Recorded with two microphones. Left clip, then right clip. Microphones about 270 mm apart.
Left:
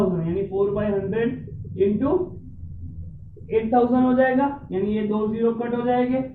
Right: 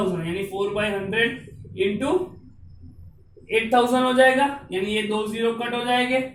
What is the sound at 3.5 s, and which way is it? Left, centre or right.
Speech, right.